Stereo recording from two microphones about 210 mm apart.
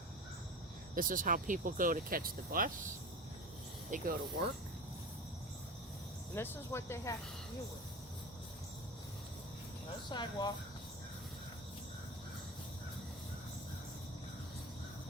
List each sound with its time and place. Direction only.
0.9 s speech: 40° right (ahead or behind)
3.9 s speech: 40° right (ahead or behind)
6.3 s speech: 10° left (ahead or behind)
10.1 s speech: 20° left (ahead or behind)